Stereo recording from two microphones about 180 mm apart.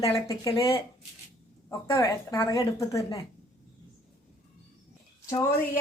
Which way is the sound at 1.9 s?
25° left (ahead or behind).